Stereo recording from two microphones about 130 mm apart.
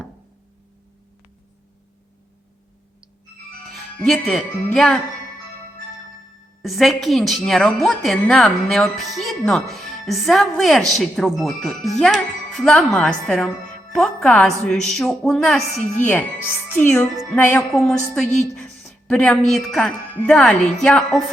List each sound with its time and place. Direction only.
4.0 s a woman's voice: 5° left (ahead or behind)
6.6 s a woman's voice: centre (ahead or behind)
16.0 s speech: 15° left (ahead or behind)
17.7 s a woman's voice: 5° left (ahead or behind)
18.5 s a sound: 5° left (ahead or behind)
19.5 s speech: 5° left (ahead or behind)